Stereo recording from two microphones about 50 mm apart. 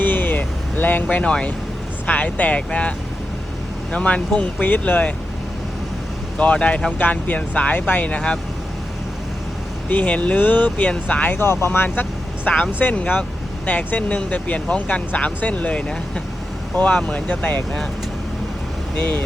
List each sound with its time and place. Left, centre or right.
0.0 s vehicle: left
1.2 s speech: left
2.0 s speech: left
3.9 s speech: left
4.9 s speech: left
6.3 s speech: left
9.9 s speech: left
10.3 s speech: left
10.8 s speech: left
11.3 s speech: left
12.5 s speech: left
13.7 s speech: left
18.9 s speech: left